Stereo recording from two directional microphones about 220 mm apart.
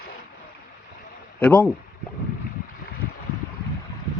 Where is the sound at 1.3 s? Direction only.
5° left (ahead or behind).